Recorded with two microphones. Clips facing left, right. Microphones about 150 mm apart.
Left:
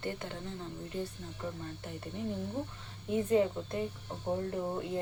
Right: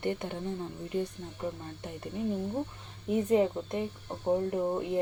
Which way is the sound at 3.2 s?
20° right (ahead or behind).